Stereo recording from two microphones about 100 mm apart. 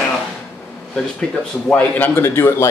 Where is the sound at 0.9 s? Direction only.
10° left (ahead or behind).